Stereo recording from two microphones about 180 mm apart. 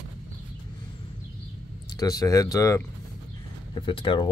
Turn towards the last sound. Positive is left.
turn(degrees=30)  # may be behind; listen again after turning